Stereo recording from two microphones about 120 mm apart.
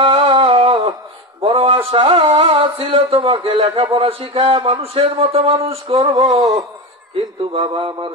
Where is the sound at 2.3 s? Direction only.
50° right (ahead or behind).